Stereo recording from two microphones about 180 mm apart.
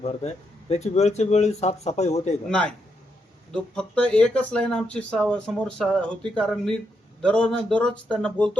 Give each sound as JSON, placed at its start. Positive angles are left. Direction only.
{"t": 0.0, "sound": "speech", "side_deg": 35}
{"t": 2.5, "sound": "speech", "side_deg": 5}